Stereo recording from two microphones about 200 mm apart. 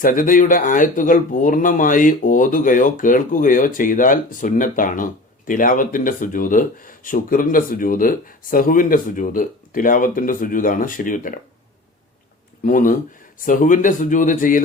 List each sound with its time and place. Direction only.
0.0 s speech: 45° left (ahead or behind)
12.6 s speech: 40° left (ahead or behind)